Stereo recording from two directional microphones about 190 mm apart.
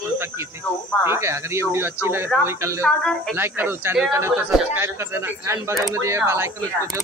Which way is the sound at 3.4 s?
10° right (ahead or behind).